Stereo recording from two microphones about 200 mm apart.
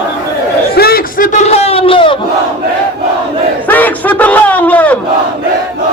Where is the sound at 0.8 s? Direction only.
50° left (ahead or behind); by 2.1 s 25° left (ahead or behind).